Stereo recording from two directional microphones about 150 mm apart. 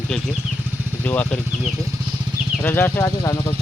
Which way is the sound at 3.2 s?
25° left (ahead or behind).